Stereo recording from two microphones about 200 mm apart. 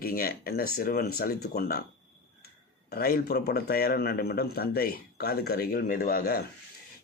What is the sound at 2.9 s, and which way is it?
Speech, 50° left (ahead or behind).